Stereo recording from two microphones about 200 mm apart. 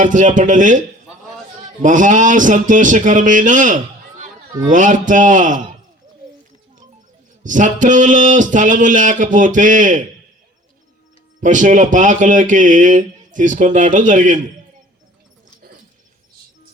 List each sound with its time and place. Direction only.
0.0 s speech: 40° right (ahead or behind)
1.8 s speech: 40° right (ahead or behind)
7.4 s speech: 40° right (ahead or behind)
11.3 s speech: 40° right (ahead or behind)